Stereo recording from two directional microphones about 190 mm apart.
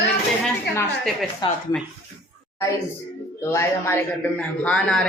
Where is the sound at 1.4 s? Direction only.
25° left (ahead or behind).